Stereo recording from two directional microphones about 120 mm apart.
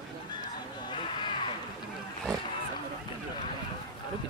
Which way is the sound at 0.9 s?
40° left (ahead or behind).